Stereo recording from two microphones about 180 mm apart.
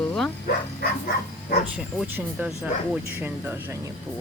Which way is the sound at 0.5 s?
60° left (ahead or behind).